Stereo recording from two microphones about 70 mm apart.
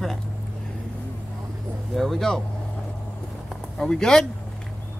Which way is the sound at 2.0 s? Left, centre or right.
Centre.